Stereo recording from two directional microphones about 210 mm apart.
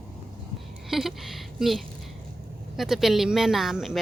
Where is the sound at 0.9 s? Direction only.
Centre (ahead or behind).